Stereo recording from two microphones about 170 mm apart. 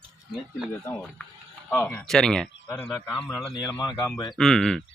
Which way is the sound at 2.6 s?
15° left (ahead or behind).